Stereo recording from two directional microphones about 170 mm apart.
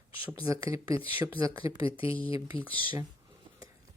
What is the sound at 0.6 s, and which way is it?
Speech, 30° left (ahead or behind).